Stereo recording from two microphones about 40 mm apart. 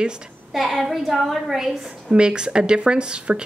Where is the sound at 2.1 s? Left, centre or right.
Right.